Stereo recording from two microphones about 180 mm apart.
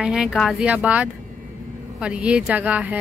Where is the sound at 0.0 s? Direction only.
5° right (ahead or behind).